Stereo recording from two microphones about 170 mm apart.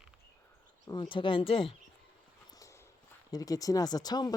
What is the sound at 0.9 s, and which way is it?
Speech, 30° left (ahead or behind).